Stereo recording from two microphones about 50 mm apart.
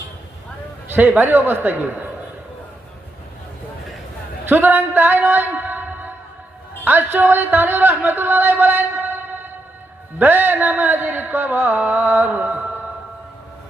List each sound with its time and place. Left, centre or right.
0.9 s a man's voice: right
4.4 s a man's voice: right
5.5 s a sound: right
6.8 s a man's voice: right